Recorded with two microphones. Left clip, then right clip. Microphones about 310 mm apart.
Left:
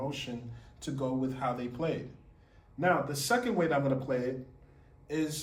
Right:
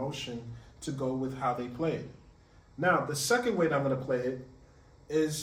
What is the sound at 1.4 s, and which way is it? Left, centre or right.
Speech, centre.